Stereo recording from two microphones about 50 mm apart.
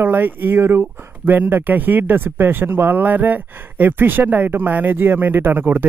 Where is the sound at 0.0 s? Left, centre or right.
Right.